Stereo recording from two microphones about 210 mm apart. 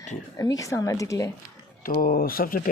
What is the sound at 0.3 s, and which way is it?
Speech, 15° left (ahead or behind).